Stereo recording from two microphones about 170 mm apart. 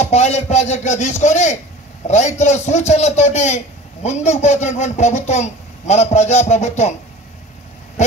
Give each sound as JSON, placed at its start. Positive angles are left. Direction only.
{"t": 0.0, "sound": "a man's voice", "side_deg": 40}